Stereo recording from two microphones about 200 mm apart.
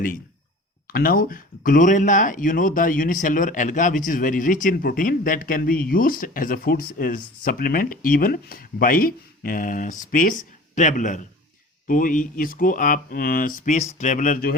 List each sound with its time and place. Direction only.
0.9 s speech: 45° left (ahead or behind)